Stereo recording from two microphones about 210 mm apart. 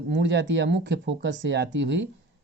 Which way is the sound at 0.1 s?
60° right (ahead or behind).